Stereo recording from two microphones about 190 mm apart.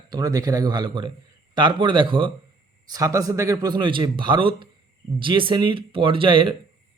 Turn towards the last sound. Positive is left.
turn(degrees=-25)  # may be behind; listen again after turning